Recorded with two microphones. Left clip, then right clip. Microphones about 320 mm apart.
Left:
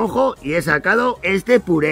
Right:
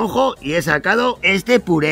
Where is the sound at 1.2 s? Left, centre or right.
Centre.